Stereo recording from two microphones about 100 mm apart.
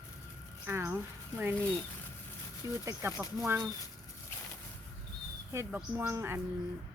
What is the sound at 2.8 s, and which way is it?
Speech, 30° right (ahead or behind).